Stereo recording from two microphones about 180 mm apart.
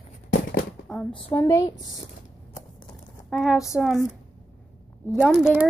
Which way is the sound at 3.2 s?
Centre (ahead or behind).